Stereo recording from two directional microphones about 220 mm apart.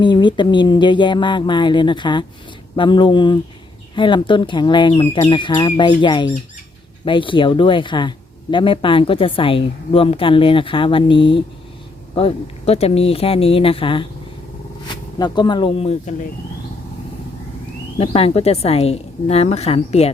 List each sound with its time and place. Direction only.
0.0 s speech: 20° left (ahead or behind)
15.2 s speech: 20° left (ahead or behind)
17.9 s speech: 25° left (ahead or behind)